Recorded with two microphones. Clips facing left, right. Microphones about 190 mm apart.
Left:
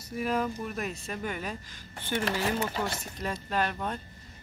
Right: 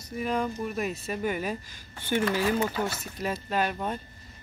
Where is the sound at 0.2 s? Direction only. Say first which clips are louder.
Right 1 dB; 5° left (ahead or behind); by 2.3 s 15° right (ahead or behind).